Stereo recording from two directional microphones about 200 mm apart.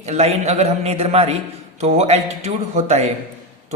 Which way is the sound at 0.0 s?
35° right (ahead or behind).